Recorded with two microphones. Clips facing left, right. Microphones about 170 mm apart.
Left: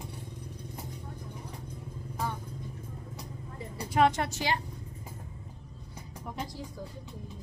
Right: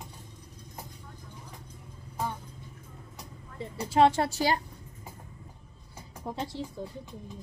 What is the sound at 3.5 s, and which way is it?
A woman's voice, 25° right (ahead or behind).